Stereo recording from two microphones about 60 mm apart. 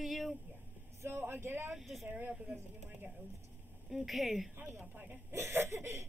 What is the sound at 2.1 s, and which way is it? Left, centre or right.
Speech, right.